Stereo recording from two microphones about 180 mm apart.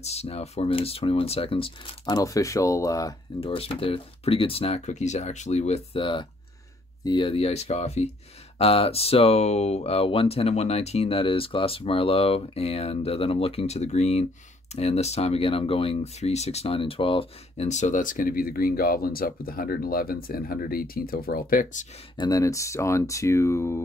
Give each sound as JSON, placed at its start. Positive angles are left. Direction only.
{"t": 0.0, "sound": "speech", "side_deg": 35}
{"t": 3.3, "sound": "speech", "side_deg": 30}
{"t": 22.1, "sound": "speech", "side_deg": 20}